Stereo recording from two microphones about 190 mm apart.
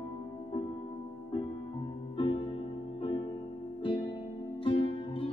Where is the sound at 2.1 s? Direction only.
30° left (ahead or behind).